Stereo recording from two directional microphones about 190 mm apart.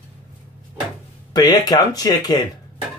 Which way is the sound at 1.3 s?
20° left (ahead or behind).